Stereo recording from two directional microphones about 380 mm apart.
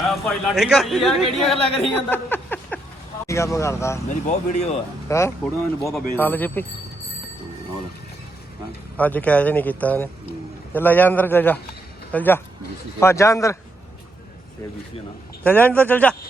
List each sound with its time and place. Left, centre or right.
0.1 s a man's voice: centre
9.0 s a man's voice: centre
15.4 s a man's voice: centre